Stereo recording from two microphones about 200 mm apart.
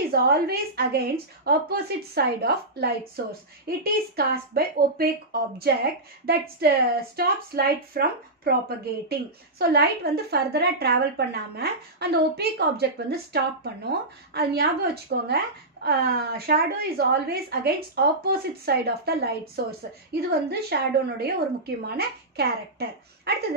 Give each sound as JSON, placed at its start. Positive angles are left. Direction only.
{"t": 0.1, "sound": "a woman's voice", "side_deg": -50}